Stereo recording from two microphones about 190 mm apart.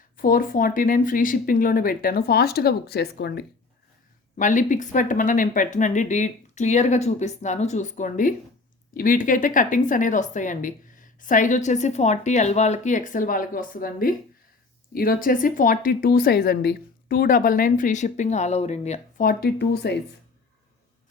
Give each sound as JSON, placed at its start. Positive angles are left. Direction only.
{"t": 0.2, "sound": "speech", "side_deg": 45}
{"t": 4.4, "sound": "speech", "side_deg": 40}